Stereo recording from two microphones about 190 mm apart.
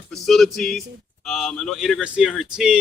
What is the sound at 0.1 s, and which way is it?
Speech, centre (ahead or behind).